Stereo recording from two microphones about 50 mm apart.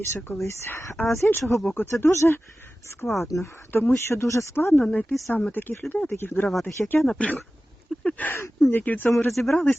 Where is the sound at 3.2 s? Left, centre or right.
Left.